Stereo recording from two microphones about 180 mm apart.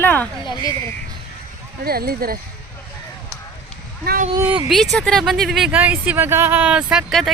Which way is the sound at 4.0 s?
55° right (ahead or behind).